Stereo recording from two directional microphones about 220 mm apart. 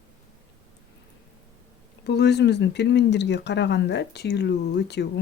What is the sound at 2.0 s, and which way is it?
Speech, 50° left (ahead or behind).